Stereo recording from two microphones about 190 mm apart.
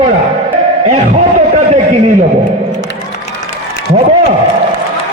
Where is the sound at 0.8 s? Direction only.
35° right (ahead or behind).